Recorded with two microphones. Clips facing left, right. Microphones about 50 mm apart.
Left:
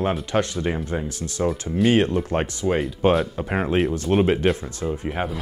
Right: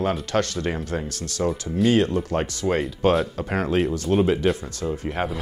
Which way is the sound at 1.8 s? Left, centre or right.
Left.